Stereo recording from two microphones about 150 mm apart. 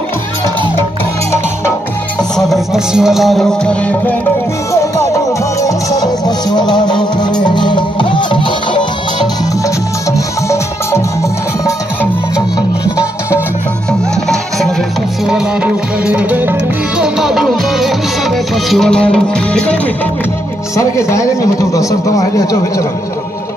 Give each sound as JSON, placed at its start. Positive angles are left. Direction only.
{"t": 2.3, "sound": "music", "side_deg": 0}
{"t": 5.6, "sound": "music", "side_deg": 20}
{"t": 10.1, "sound": "music", "side_deg": 20}
{"t": 15.2, "sound": "music", "side_deg": -5}
{"t": 20.7, "sound": "a man's voice", "side_deg": 20}